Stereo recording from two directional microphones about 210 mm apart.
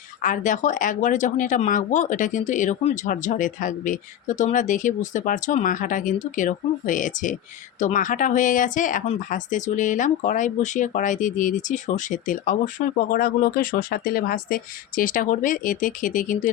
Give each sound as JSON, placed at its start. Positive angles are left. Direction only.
{"t": 0.2, "sound": "speech", "side_deg": 35}